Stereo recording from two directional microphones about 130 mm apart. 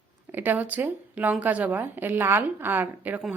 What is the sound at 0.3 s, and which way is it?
A woman's voice, 15° right (ahead or behind).